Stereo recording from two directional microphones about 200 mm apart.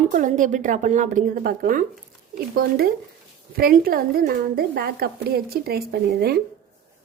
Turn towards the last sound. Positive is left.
turn(degrees=-50)  # may be behind; listen again after turning